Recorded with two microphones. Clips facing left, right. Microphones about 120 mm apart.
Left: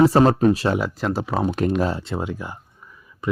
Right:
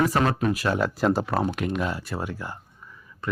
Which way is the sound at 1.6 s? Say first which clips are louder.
Left 6 dB; 35° left (ahead or behind).